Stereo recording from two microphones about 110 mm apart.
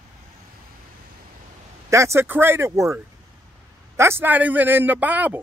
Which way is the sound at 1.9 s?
25° right (ahead or behind).